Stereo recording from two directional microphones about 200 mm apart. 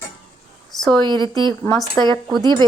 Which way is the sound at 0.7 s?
Centre (ahead or behind).